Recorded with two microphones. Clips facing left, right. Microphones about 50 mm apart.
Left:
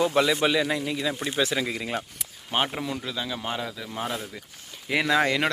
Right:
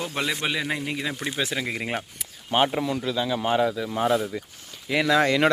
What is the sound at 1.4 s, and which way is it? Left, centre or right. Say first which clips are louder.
Speech: left 2 dB; centre.